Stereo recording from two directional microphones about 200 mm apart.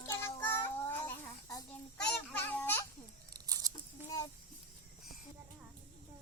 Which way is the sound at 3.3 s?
20° right (ahead or behind).